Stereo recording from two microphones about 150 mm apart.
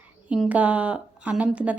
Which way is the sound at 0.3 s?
10° right (ahead or behind).